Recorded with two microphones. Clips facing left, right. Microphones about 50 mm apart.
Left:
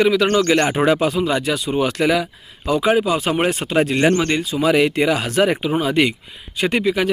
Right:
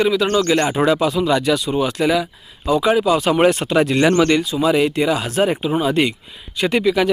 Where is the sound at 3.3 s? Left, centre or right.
Centre.